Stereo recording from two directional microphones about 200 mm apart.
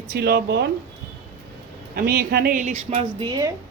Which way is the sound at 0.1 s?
55° right (ahead or behind).